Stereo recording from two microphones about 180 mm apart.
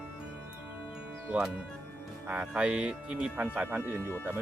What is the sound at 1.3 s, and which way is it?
Speech, 5° right (ahead or behind).